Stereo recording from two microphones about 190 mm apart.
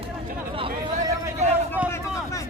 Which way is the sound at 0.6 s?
30° right (ahead or behind).